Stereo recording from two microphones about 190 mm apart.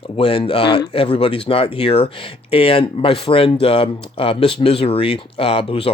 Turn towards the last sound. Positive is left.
turn(degrees=30)  # may be behind; listen again after turning